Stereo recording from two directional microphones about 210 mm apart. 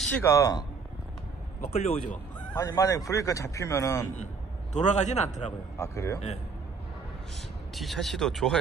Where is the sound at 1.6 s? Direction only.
30° left (ahead or behind).